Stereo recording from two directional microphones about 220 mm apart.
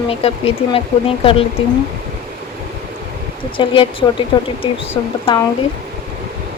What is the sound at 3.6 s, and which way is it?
A woman's voice, 20° left (ahead or behind).